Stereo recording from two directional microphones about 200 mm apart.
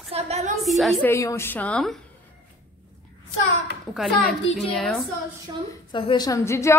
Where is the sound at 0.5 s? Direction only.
Centre (ahead or behind).